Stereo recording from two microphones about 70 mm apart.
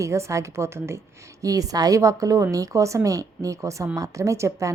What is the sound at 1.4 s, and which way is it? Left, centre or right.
A woman's voice, right.